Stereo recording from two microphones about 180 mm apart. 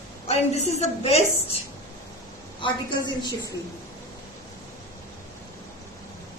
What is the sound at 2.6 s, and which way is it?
Speech, 25° left (ahead or behind).